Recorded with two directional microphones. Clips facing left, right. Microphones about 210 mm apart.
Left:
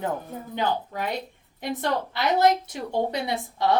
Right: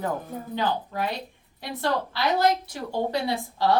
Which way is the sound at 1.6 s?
20° left (ahead or behind).